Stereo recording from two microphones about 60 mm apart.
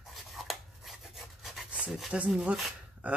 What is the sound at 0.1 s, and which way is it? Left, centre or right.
Filing, centre.